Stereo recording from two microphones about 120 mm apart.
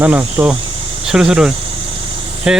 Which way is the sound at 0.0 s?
15° right (ahead or behind).